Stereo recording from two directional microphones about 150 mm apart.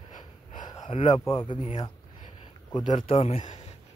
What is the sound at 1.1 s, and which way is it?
Speech, 30° left (ahead or behind).